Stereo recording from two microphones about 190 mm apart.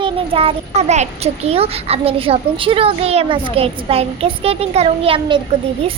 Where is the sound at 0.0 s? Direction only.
30° right (ahead or behind).